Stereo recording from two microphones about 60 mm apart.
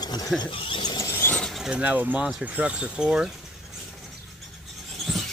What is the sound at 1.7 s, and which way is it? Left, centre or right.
Speech, right.